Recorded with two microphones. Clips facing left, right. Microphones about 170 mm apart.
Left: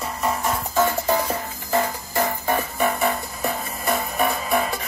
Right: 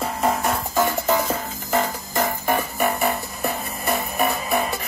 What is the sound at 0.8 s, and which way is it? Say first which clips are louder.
Music: left 1 dB; 20° right (ahead or behind).